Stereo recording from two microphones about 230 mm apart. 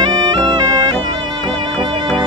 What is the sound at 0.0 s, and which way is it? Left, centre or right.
Bagpipes, centre.